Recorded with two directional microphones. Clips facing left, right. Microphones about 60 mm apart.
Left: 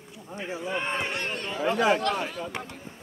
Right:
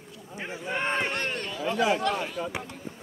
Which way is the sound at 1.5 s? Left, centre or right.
Left.